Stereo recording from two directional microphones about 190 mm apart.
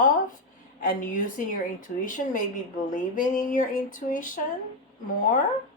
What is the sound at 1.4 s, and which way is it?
Speech, 45° left (ahead or behind).